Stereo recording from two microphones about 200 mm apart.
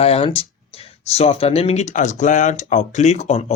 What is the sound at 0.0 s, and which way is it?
Speech, 30° left (ahead or behind).